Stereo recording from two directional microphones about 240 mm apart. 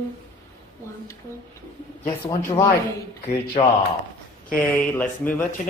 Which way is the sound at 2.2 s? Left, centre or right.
Centre.